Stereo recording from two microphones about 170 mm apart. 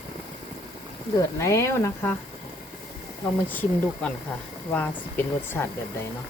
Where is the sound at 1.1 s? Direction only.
15° left (ahead or behind).